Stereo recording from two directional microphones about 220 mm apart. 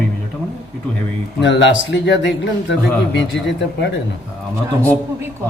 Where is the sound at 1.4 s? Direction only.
55° left (ahead or behind).